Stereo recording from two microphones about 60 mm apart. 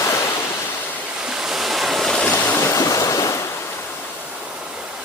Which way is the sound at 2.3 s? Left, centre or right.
Left.